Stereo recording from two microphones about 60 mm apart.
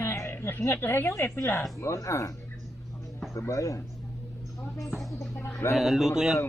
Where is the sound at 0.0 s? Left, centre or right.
Left.